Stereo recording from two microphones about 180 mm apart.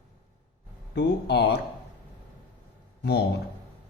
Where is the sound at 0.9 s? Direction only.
65° left (ahead or behind).